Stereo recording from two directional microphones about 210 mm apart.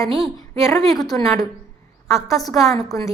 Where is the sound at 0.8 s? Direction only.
Centre (ahead or behind).